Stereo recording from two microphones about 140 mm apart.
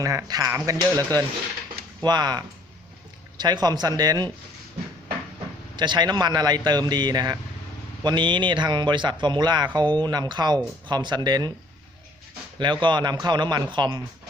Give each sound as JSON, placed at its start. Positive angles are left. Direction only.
{"t": 0.0, "sound": "speech", "side_deg": -25}
{"t": 5.7, "sound": "speech", "side_deg": -30}
{"t": 12.5, "sound": "speech", "side_deg": -35}